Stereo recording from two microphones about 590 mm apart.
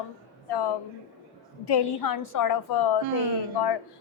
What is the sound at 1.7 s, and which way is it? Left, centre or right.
A woman's voice, left.